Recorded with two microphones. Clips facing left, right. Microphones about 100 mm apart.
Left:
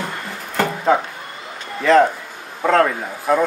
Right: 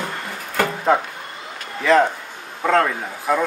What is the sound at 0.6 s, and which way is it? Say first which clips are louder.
Music: left 1 dB; centre (ahead or behind).